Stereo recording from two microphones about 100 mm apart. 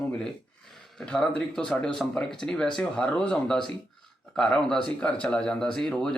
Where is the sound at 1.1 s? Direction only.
10° left (ahead or behind).